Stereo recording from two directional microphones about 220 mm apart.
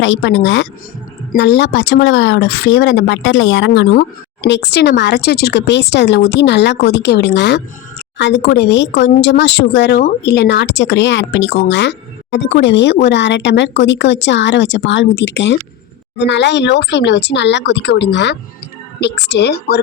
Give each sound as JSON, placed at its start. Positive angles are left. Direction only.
{"t": 0.0, "sound": "speech", "side_deg": 55}